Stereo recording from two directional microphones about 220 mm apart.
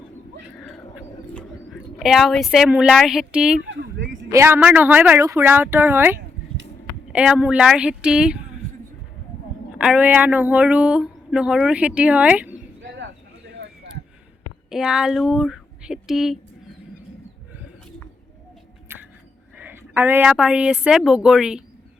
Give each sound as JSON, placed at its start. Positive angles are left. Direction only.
{"t": 0.5, "sound": "a sound", "side_deg": 0}
{"t": 3.7, "sound": "speech", "side_deg": -55}
{"t": 4.3, "sound": "a woman's voice", "side_deg": -10}
{"t": 9.7, "sound": "speech", "side_deg": -5}
{"t": 14.7, "sound": "speech", "side_deg": -5}
{"t": 18.9, "sound": "a sound", "side_deg": -10}
{"t": 19.5, "sound": "a woman's voice", "side_deg": -10}